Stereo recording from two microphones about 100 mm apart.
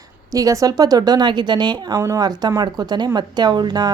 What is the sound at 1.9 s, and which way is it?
Speech, 30° right (ahead or behind).